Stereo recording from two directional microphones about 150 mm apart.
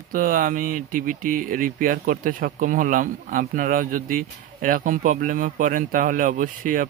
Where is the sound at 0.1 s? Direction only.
65° right (ahead or behind).